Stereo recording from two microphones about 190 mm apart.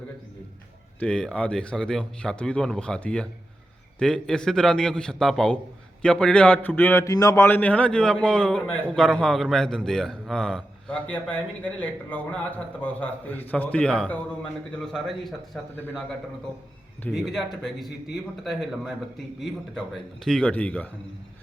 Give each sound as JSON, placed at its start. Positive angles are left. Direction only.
{"t": 0.9, "sound": "a man's voice", "side_deg": 5}
{"t": 17.0, "sound": "a man's voice", "side_deg": 0}
{"t": 19.4, "sound": "a man's voice", "side_deg": 0}